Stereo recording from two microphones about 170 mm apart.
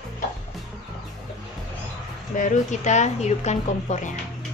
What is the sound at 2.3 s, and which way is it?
A woman's voice, 50° left (ahead or behind).